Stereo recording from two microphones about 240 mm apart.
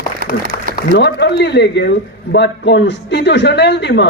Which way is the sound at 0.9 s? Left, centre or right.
Left.